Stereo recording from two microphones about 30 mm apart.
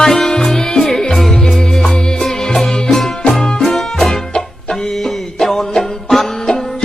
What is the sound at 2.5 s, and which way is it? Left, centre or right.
Music, centre.